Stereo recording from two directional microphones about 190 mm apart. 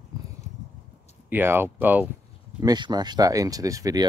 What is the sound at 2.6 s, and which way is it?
Speech, 20° right (ahead or behind).